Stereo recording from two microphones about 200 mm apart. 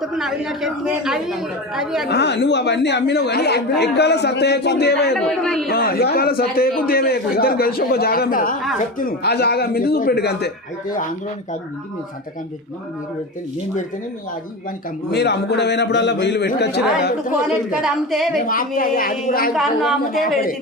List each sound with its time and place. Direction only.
0.0 s a woman's voice: centre (ahead or behind)
2.0 s speech: 55° left (ahead or behind)
5.1 s a woman's voice: 5° left (ahead or behind)
5.6 s a man's voice: 50° left (ahead or behind)
15.1 s speech: 55° left (ahead or behind)
17.7 s a woman's voice: 5° right (ahead or behind)
18.3 s a man's voice: 45° left (ahead or behind)
19.5 s a woman's voice: centre (ahead or behind)
20.2 s a man's voice: 45° left (ahead or behind)